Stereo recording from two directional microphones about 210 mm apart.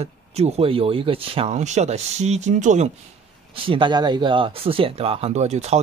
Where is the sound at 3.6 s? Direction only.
25° right (ahead or behind).